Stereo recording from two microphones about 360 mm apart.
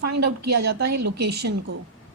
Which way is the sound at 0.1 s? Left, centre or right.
Right.